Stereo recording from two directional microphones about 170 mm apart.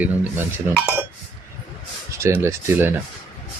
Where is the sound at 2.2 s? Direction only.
15° right (ahead or behind).